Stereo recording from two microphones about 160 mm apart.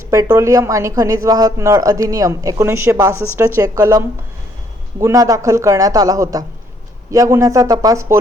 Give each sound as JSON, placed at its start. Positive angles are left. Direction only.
{"t": 0.1, "sound": "speech", "side_deg": -20}